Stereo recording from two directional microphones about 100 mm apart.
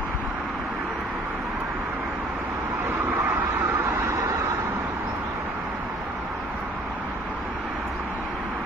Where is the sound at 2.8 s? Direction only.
25° right (ahead or behind).